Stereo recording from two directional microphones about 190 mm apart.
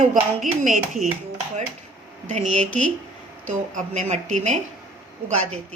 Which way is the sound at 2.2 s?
40° right (ahead or behind).